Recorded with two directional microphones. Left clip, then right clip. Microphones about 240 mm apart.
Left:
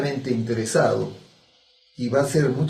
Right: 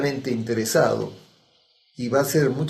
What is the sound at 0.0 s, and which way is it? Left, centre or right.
Speech, right.